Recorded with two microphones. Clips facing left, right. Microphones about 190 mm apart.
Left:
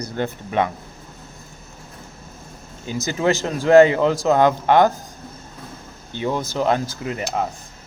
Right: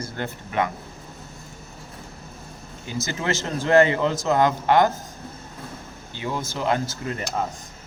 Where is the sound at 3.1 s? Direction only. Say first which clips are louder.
Left 7 dB; 15° left (ahead or behind).